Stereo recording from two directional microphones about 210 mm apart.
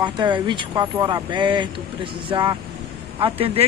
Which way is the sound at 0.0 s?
20° right (ahead or behind).